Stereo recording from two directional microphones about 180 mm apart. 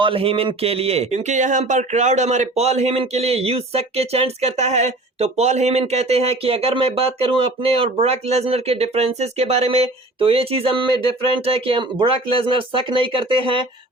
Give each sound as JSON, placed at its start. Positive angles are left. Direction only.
{"t": 0.0, "sound": "speech", "side_deg": -30}